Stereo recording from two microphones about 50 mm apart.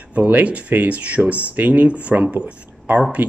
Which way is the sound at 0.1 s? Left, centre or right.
Right.